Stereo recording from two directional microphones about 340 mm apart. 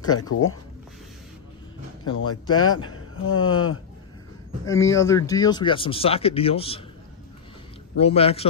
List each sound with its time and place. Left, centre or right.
0.3 s a man's voice: left
2.1 s a man's voice: left
4.6 s speech: centre
8.0 s speech: centre